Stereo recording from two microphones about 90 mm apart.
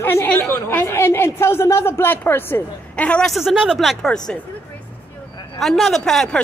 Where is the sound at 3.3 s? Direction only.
5° right (ahead or behind).